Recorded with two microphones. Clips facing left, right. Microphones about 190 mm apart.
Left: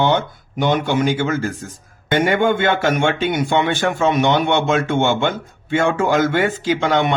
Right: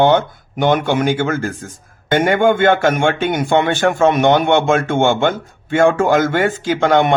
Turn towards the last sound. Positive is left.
turn(degrees=-50)  # may be behind; listen again after turning